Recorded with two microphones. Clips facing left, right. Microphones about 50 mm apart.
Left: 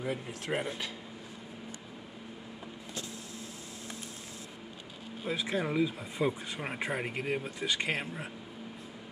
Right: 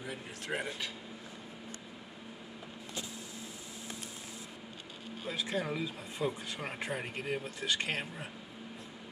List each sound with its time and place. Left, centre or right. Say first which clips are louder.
0.0 s speech: left 6 dB; left
5.2 s speech: left 3 dB; left